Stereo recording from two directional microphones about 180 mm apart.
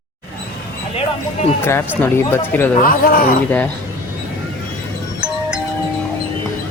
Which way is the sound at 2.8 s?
50° left (ahead or behind).